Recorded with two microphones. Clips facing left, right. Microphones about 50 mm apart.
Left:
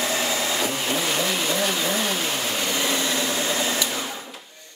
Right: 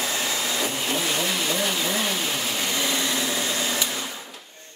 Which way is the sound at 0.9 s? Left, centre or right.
Centre.